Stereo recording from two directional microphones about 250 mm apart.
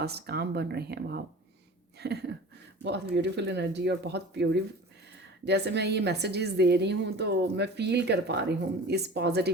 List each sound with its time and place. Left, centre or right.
0.0 s a woman's voice: right